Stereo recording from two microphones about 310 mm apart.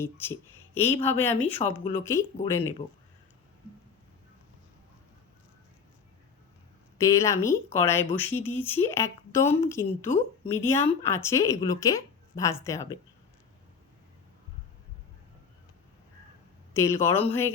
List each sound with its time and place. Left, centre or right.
0.0 s a woman's voice: centre
1.6 s a woman's voice: centre
7.0 s a woman's voice: centre
16.7 s a woman's voice: centre